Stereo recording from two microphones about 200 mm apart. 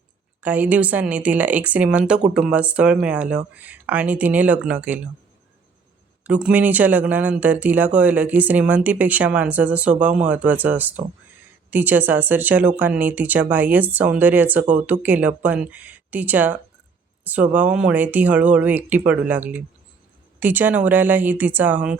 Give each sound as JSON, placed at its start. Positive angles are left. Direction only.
{"t": 0.4, "sound": "speech", "side_deg": -10}
{"t": 6.2, "sound": "speech", "side_deg": -5}